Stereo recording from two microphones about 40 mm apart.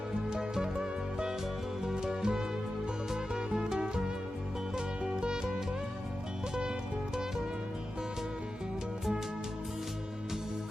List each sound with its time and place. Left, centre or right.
0.1 s music: centre
5.0 s music: centre